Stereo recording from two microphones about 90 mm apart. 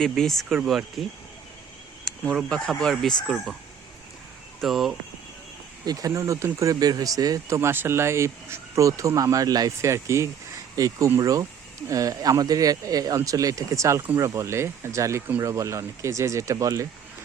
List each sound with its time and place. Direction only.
0.0 s speech: 5° left (ahead or behind)
3.2 s speech: 5° right (ahead or behind)
4.6 s speech: centre (ahead or behind)
5.8 s speech: 45° right (ahead or behind)